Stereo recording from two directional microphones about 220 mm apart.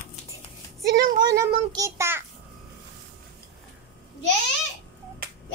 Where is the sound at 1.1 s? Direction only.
15° right (ahead or behind).